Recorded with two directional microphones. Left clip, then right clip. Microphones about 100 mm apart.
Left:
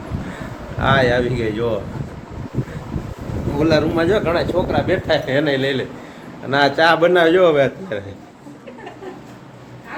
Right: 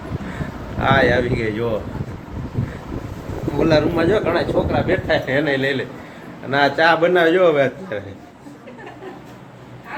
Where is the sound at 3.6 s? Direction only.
20° left (ahead or behind).